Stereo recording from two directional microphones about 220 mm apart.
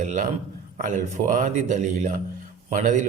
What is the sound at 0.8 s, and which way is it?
Speech, 35° right (ahead or behind).